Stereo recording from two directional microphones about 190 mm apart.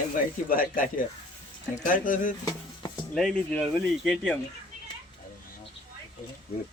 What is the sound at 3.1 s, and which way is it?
Speech, 5° left (ahead or behind).